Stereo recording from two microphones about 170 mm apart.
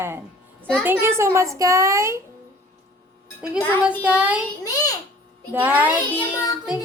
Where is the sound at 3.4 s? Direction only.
5° right (ahead or behind).